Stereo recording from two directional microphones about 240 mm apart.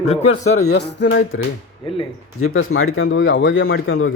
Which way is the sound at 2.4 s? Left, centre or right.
Left.